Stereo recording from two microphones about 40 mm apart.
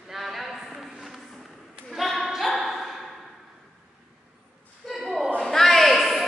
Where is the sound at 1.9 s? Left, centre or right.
Centre.